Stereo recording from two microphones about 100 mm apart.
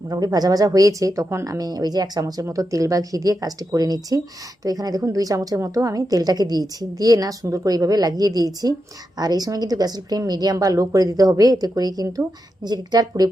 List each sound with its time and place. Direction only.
0.1 s speech: 40° right (ahead or behind)